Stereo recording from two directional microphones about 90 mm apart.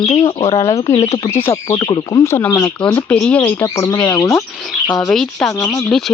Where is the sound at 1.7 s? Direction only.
55° left (ahead or behind).